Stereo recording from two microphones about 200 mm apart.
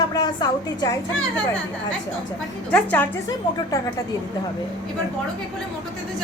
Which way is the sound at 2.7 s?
5° left (ahead or behind).